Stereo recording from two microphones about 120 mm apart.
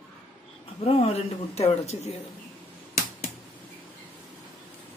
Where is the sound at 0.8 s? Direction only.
55° left (ahead or behind).